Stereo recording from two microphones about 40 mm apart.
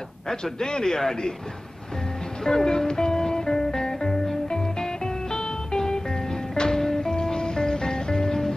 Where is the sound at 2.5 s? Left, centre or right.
Centre.